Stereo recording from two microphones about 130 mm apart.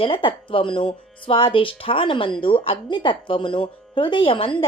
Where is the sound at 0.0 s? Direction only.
40° left (ahead or behind).